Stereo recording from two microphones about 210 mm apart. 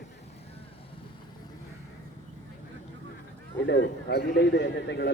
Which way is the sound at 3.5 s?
55° left (ahead or behind).